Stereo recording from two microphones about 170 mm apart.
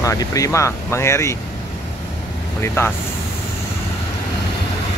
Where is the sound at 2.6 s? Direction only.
15° left (ahead or behind).